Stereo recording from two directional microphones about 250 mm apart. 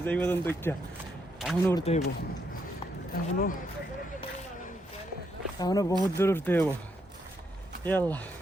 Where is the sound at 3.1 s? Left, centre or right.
Left.